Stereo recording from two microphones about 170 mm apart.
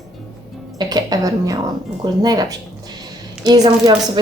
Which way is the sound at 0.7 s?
25° right (ahead or behind).